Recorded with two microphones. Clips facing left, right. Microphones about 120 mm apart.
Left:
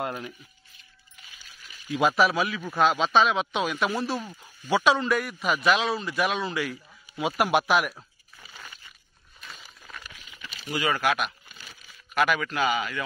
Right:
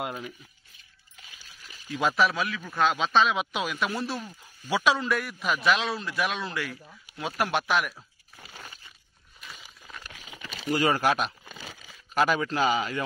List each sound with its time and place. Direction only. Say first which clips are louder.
0.0 s a man's voice: left 2 dB; 5° right (ahead or behind)
1.9 s a man's voice: left 3 dB; 5° left (ahead or behind)
9.4 s a sound: left 1 dB; 10° right (ahead or behind)
10.1 s crumpling: right 3 dB; 90° right
10.7 s a man's voice: right 2 dB; 40° right (ahead or behind)
11.6 s a sound: right 4 dB; 90° right
12.1 s a man's voice: even; 30° right (ahead or behind)